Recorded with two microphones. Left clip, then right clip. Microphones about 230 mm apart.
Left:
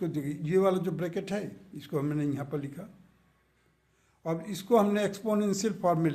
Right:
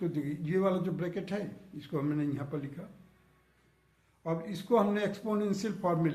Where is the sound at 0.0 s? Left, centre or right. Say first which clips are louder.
Left 1 dB; left.